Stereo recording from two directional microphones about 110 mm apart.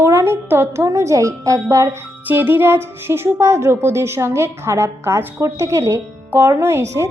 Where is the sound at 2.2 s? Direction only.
20° right (ahead or behind).